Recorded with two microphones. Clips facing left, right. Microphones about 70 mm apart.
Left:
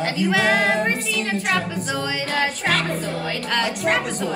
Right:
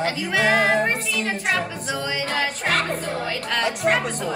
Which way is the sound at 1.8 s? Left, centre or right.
Centre.